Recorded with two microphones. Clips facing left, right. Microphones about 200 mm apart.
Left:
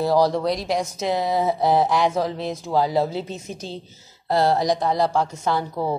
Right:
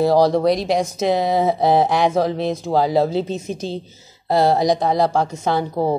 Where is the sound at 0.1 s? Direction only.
65° right (ahead or behind).